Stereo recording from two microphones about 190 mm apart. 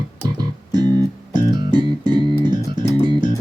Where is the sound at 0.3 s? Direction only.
20° right (ahead or behind).